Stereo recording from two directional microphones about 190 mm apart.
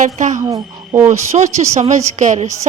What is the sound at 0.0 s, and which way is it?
Speech, 40° right (ahead or behind).